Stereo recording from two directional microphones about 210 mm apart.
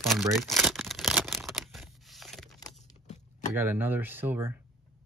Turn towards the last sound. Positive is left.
turn(degrees=-10)  # may be behind; listen again after turning